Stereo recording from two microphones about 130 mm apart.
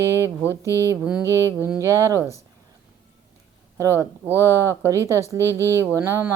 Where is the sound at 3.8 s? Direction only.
20° right (ahead or behind).